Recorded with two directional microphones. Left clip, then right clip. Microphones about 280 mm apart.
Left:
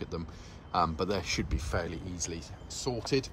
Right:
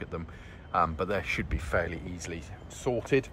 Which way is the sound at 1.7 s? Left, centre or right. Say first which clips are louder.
Right 7 dB; centre.